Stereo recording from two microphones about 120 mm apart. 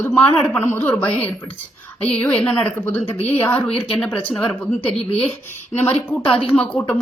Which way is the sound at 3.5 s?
55° left (ahead or behind).